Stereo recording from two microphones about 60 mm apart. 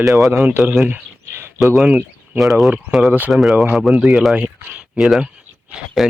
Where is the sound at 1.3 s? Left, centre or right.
Right.